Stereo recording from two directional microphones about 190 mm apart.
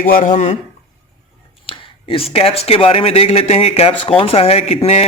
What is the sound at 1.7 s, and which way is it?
Speech, 30° left (ahead or behind).